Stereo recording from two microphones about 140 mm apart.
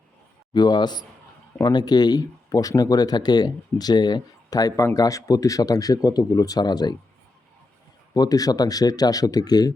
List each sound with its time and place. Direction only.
0.5 s speech: 30° left (ahead or behind)
8.1 s speech: 25° left (ahead or behind)